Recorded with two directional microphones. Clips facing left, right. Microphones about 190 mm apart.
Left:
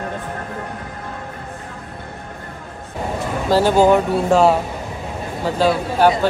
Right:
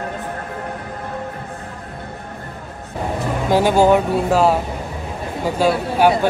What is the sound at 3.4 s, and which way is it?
Speech, 15° right (ahead or behind).